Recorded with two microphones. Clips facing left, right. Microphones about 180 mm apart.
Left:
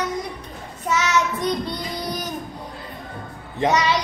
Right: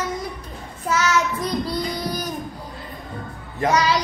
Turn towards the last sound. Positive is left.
turn(degrees=0)  # may be behind; listen again after turning